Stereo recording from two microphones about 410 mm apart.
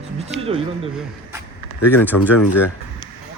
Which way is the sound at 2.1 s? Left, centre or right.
Left.